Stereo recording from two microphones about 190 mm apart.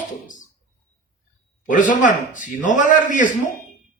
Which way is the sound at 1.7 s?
40° left (ahead or behind).